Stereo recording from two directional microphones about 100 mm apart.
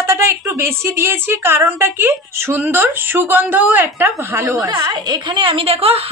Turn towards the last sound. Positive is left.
turn(degrees=-70)  # may be behind; listen again after turning